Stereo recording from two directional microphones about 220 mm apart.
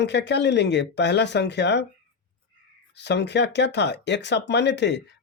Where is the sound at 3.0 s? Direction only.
50° left (ahead or behind).